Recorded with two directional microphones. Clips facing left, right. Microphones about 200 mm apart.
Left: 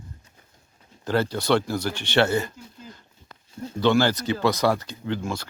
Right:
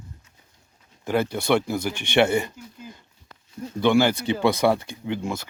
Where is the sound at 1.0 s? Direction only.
10° right (ahead or behind).